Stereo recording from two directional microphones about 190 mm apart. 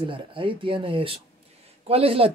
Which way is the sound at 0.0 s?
25° right (ahead or behind).